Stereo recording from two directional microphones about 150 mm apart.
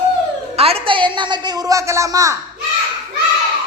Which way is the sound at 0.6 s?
40° right (ahead or behind).